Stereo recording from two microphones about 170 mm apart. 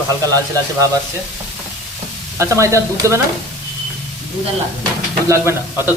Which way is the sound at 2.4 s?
15° right (ahead or behind).